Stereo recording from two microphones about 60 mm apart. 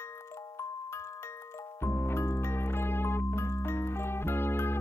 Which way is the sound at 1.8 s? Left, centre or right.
Left.